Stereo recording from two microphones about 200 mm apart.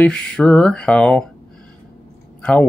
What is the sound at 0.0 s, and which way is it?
Speech, 5° left (ahead or behind).